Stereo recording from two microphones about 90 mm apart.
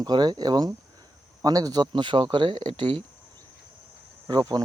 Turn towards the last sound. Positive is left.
turn(degrees=-45)  # may be behind; listen again after turning